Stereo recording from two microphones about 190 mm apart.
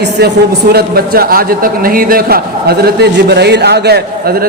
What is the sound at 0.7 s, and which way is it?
A man's voice, 55° right (ahead or behind).